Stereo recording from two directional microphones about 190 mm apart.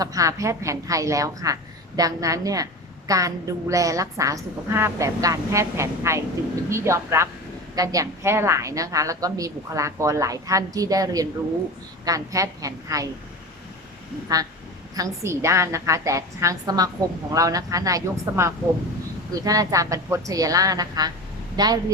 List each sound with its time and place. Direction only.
0.0 s a woman's voice: 15° right (ahead or behind)
14.9 s a woman's voice: 15° right (ahead or behind)